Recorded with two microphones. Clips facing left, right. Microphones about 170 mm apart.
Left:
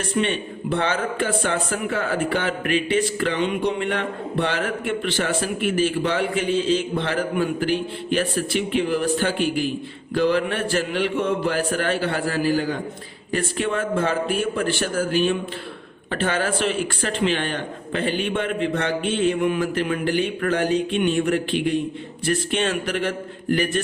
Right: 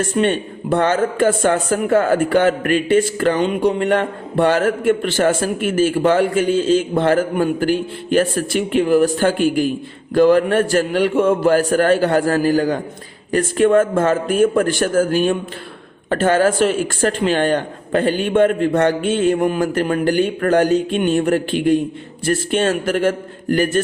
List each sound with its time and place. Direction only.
0.0 s a man's voice: 45° right (ahead or behind)